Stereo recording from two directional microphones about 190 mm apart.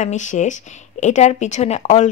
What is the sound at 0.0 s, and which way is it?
A woman's voice, 40° left (ahead or behind).